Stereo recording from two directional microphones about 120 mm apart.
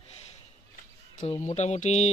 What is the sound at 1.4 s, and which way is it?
Speech, 70° left (ahead or behind).